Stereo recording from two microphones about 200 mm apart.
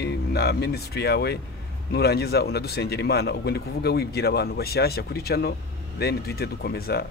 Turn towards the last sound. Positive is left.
turn(degrees=50)  # may be behind; listen again after turning